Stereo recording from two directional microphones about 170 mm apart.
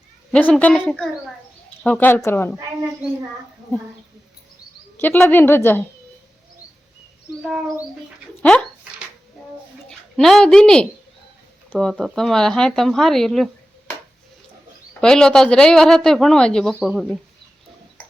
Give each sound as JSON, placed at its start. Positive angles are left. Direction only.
{"t": 0.3, "sound": "a woman's voice", "side_deg": 5}
{"t": 4.9, "sound": "a woman's voice", "side_deg": 10}
{"t": 8.4, "sound": "speech", "side_deg": 5}
{"t": 10.2, "sound": "speech", "side_deg": 0}
{"t": 15.0, "sound": "speech", "side_deg": 5}